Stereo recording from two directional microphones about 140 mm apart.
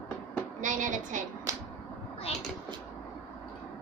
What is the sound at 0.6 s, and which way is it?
Speech, 65° right (ahead or behind).